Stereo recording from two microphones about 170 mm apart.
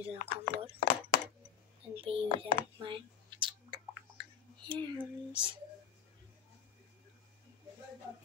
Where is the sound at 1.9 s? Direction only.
35° right (ahead or behind).